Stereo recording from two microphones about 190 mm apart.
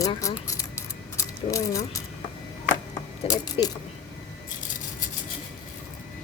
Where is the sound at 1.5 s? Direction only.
15° left (ahead or behind).